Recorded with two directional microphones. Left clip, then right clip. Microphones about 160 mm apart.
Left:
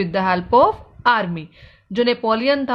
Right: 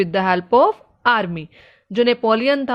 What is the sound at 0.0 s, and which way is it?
A woman's voice, 50° right (ahead or behind).